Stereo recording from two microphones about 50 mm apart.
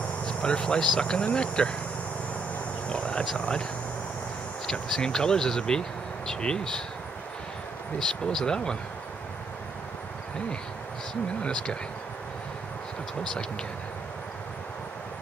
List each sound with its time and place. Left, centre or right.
0.2 s speech: left
2.9 s a sound: left
3.3 s speech: centre
4.9 s speech: centre
8.0 s speech: centre
11.4 s speech: centre